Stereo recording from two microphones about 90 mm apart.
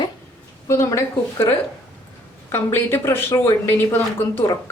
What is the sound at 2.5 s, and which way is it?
A woman's voice, 25° left (ahead or behind).